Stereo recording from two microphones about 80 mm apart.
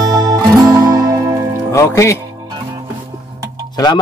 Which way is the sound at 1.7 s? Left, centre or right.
Left.